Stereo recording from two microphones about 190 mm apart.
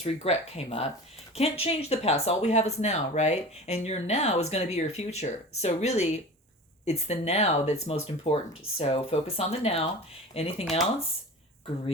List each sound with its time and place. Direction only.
0.0 s speech: 35° left (ahead or behind)